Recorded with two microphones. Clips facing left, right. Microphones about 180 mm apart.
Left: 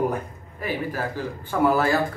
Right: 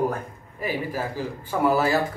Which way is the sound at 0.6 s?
10° right (ahead or behind).